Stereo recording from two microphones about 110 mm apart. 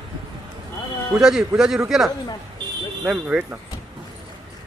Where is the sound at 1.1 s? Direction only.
5° right (ahead or behind).